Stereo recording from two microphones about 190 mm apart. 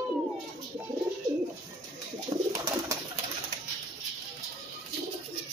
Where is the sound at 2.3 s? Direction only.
25° right (ahead or behind).